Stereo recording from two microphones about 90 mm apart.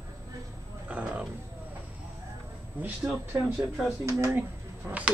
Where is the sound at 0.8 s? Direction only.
15° right (ahead or behind).